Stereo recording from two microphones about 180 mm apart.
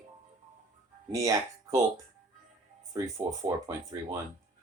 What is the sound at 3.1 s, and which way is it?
Speech, 20° right (ahead or behind).